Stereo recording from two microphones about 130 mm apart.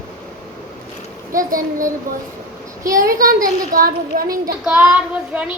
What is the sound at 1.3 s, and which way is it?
Speech, 90° right.